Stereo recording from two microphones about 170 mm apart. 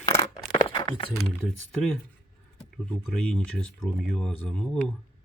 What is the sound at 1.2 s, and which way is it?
Speech, centre (ahead or behind).